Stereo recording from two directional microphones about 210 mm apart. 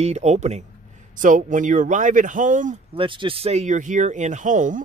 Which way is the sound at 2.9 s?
25° right (ahead or behind).